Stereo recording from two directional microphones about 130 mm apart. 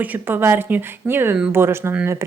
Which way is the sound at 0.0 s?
15° right (ahead or behind).